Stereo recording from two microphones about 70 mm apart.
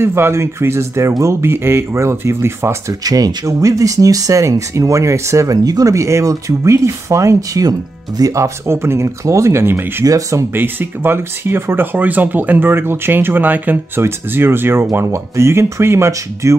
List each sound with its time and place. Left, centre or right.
0.0 s speech: right
2.9 s speech: right
10.0 s speech: right
10.5 s speech: right